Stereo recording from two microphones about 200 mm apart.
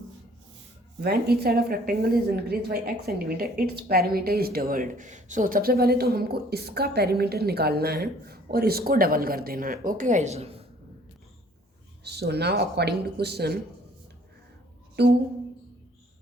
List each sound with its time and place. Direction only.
0.9 s a woman's voice: 50° right (ahead or behind); by 10.6 s 30° right (ahead or behind)
12.0 s speech: 55° right (ahead or behind)
15.0 s speech: 55° right (ahead or behind)